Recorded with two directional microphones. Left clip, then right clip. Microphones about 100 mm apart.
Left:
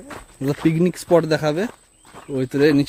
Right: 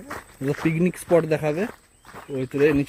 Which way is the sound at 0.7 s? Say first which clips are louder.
Left 2 dB; 45° left (ahead or behind).